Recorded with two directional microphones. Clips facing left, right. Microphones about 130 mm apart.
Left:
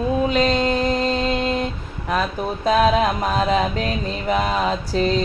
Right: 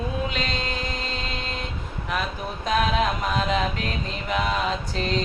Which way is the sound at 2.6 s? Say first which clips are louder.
Left 6 dB; 35° left (ahead or behind).